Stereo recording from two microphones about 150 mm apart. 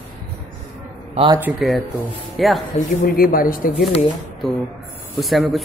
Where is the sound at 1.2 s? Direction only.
40° right (ahead or behind).